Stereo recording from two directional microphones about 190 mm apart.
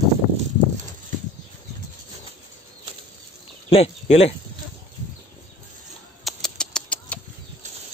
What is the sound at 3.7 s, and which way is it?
Speech, 35° left (ahead or behind).